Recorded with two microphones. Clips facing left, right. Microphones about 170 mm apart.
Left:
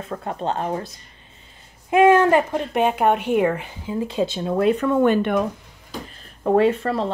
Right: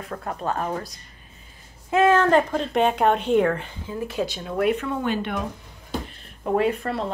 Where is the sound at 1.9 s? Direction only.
15° left (ahead or behind); by 4.8 s 30° left (ahead or behind).